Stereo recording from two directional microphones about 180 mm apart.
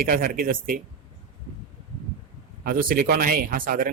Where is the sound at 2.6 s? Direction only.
55° right (ahead or behind).